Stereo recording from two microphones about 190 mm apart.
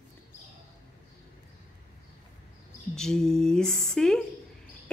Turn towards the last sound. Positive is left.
turn(degrees=5)  # may be behind; listen again after turning